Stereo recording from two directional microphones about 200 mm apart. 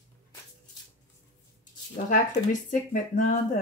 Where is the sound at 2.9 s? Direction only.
40° left (ahead or behind).